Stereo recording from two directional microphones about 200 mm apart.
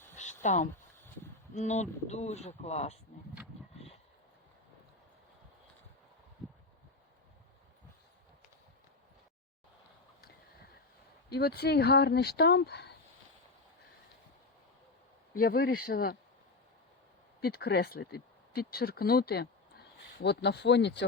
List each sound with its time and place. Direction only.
0.4 s speech: 35° left (ahead or behind)
11.3 s speech: 50° left (ahead or behind)
15.4 s speech: 50° left (ahead or behind)
17.4 s speech: 55° left (ahead or behind)